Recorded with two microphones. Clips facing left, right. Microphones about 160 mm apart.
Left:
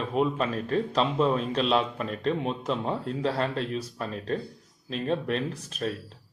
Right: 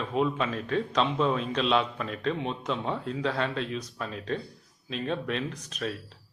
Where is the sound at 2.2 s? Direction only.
Centre (ahead or behind).